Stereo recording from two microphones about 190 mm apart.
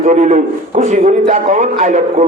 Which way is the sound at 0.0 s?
40° right (ahead or behind).